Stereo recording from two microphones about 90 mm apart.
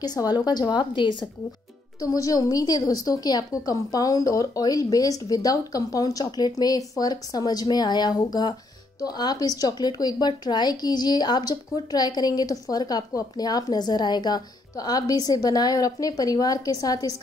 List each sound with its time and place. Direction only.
0.0 s a woman's voice: 45° left (ahead or behind)
2.0 s a woman's voice: 40° left (ahead or behind)